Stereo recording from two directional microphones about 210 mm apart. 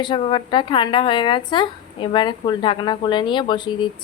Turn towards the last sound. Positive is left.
turn(degrees=20)  # may be behind; listen again after turning